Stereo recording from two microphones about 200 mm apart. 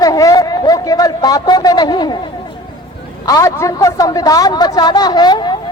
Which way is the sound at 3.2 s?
15° left (ahead or behind).